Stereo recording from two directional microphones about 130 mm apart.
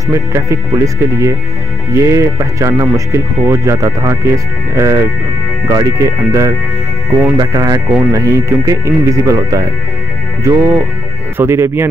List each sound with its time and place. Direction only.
0.1 s speech: 20° right (ahead or behind)